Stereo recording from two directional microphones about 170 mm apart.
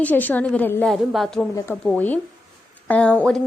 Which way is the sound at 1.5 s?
15° left (ahead or behind).